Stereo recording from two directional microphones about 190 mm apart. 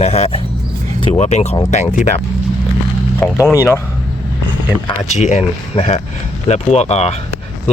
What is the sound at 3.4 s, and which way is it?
Speech, 15° left (ahead or behind).